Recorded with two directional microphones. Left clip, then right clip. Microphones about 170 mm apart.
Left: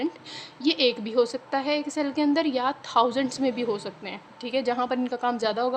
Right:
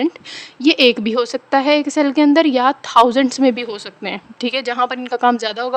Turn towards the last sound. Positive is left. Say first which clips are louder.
# right 8 dB
turn(degrees=-55)  # may be behind; listen again after turning